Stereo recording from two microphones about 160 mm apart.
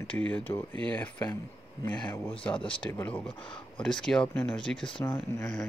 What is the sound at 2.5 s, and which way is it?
Speech, 30° left (ahead or behind).